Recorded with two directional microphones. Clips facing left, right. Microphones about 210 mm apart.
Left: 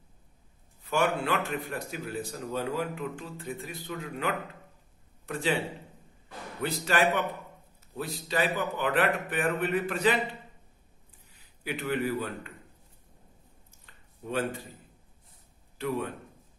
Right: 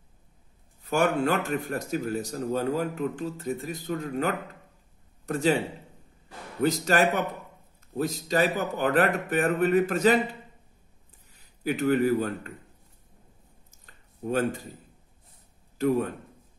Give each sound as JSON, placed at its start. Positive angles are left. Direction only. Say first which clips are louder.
{"t": 0.8, "sound": "a man's voice", "louder": "right 4 dB", "side_deg": -45}
{"t": 11.3, "sound": "a man's voice", "louder": "right 7 dB", "side_deg": -40}
{"t": 13.7, "sound": "a sound", "louder": "right 1 dB", "side_deg": -45}
{"t": 15.8, "sound": "a man's voice", "louder": "right 7 dB", "side_deg": -45}